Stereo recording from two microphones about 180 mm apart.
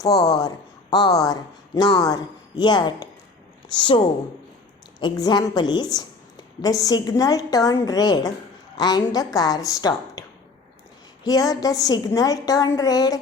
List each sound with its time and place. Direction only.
0.0 s a woman's voice: 20° left (ahead or behind)